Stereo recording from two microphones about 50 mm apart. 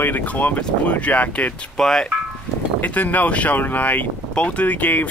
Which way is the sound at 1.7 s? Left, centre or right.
Centre.